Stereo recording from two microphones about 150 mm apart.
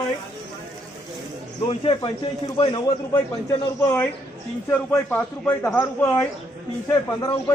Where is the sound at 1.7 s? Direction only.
35° left (ahead or behind).